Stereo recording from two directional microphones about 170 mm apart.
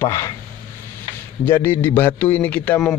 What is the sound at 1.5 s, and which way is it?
Speech, 15° left (ahead or behind).